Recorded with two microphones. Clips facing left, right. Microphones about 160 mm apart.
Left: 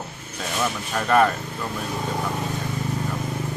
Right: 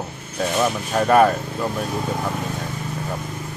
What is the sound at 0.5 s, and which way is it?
Speech, 20° right (ahead or behind).